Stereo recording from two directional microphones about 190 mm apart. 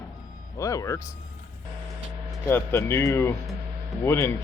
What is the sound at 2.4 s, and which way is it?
Speech, 15° left (ahead or behind).